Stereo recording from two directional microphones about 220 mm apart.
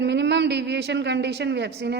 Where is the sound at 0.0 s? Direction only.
50° right (ahead or behind).